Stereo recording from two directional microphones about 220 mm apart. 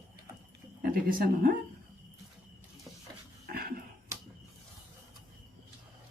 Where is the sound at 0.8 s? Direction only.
40° right (ahead or behind).